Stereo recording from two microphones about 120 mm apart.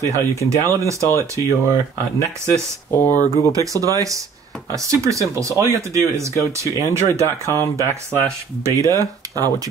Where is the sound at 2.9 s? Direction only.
20° left (ahead or behind).